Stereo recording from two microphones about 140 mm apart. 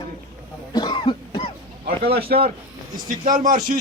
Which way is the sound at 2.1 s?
90° right.